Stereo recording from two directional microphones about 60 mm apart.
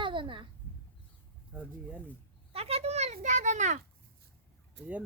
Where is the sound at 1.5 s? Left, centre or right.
Right.